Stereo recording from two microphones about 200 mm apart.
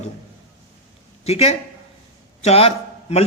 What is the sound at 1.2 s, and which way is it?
A man's voice, 30° left (ahead or behind).